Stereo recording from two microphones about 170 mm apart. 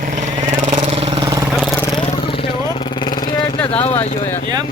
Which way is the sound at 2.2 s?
30° left (ahead or behind).